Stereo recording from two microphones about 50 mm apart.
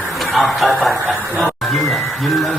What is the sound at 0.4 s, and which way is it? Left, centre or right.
Speech, centre.